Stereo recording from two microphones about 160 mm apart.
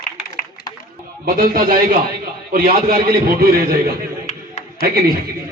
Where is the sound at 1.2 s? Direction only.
65° right (ahead or behind).